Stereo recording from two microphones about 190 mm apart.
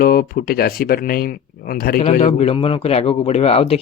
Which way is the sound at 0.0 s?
50° left (ahead or behind).